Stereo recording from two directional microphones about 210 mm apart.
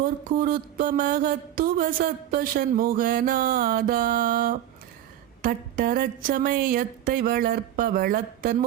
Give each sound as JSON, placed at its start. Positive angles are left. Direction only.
{"t": 0.0, "sound": "mantra", "side_deg": -40}